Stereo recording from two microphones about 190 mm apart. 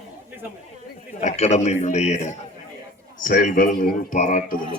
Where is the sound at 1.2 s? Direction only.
35° left (ahead or behind).